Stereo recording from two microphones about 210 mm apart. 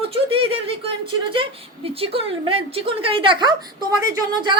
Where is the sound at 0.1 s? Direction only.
25° right (ahead or behind).